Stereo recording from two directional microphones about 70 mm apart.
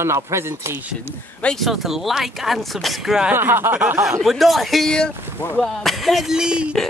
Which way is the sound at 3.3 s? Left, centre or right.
Right.